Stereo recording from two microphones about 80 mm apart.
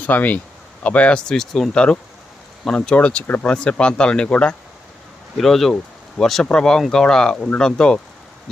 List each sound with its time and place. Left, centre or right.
0.0 s speech: centre